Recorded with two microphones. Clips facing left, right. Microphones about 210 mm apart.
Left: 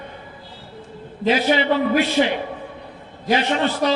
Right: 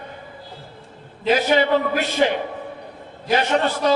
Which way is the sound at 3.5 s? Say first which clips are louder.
Right 1 dB; 45° right (ahead or behind).